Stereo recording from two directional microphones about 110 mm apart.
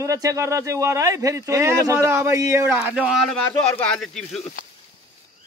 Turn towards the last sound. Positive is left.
turn(degrees=5)  # may be behind; listen again after turning